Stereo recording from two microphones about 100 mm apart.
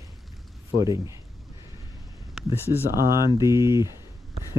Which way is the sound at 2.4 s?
5° right (ahead or behind).